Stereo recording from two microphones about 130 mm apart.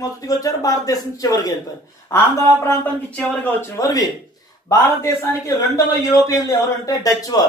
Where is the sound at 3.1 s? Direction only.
10° left (ahead or behind); by 7.5 s 30° left (ahead or behind).